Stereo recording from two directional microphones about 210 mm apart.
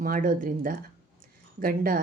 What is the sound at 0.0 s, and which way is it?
A woman's voice, 40° right (ahead or behind).